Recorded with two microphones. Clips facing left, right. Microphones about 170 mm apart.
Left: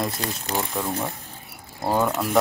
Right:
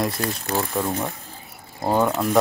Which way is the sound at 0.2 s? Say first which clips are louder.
Right 3 dB; 20° left (ahead or behind).